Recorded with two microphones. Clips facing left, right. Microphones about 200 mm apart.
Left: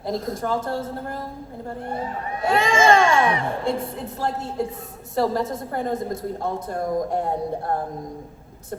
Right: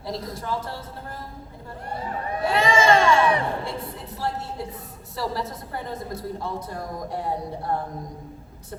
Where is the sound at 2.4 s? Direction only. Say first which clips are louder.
Left 2 dB; 50° left (ahead or behind).